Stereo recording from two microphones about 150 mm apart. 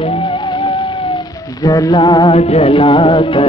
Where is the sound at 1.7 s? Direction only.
25° left (ahead or behind).